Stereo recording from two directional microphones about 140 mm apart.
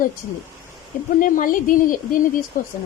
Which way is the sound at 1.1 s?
70° left (ahead or behind).